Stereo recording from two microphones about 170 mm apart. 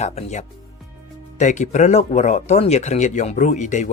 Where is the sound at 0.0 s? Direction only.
40° left (ahead or behind).